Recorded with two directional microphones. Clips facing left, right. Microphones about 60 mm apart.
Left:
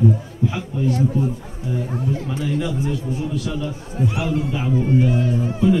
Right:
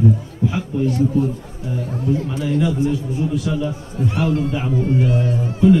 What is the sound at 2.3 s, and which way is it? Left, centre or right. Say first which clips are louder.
Speech: right 3 dB; centre.